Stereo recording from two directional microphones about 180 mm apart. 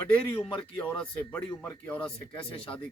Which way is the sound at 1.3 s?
10° left (ahead or behind).